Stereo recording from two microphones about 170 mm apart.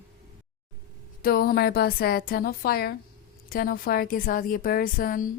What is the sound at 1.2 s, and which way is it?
A woman's voice, 60° left (ahead or behind).